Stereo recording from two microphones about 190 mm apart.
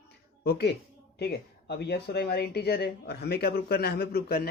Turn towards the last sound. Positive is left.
turn(degrees=55)  # may be behind; listen again after turning